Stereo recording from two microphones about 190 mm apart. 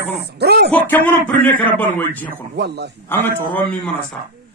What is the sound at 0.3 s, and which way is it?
Speech, 60° right (ahead or behind).